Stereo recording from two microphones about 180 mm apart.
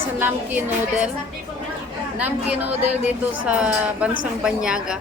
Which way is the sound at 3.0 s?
5° right (ahead or behind).